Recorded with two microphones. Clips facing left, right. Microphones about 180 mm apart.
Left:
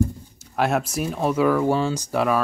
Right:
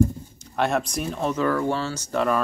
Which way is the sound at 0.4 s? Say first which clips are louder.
Left 1 dB; 5° left (ahead or behind).